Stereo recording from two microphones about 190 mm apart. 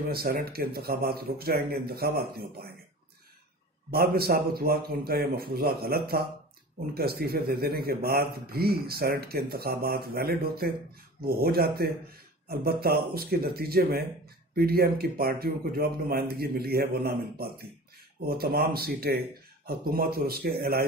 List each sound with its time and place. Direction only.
0.1 s speech: 55° right (ahead or behind)
3.9 s speech: 55° right (ahead or behind)